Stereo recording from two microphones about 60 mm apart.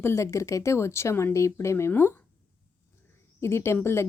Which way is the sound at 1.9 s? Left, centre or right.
Left.